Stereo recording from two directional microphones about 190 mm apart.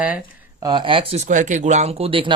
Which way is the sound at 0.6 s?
25° right (ahead or behind).